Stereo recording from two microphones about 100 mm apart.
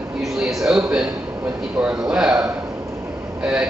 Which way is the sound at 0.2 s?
Centre (ahead or behind).